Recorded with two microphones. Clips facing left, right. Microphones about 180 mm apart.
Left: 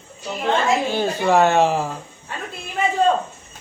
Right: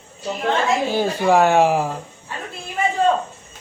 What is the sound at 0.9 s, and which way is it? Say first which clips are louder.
A man's voice: right 1 dB; 10° right (ahead or behind).